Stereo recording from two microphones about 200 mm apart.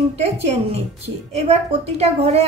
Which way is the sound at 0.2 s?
30° right (ahead or behind).